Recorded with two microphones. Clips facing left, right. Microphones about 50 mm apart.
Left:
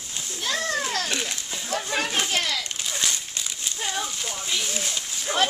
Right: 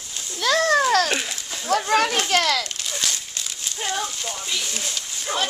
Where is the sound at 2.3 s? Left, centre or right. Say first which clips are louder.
Right 6 dB; right.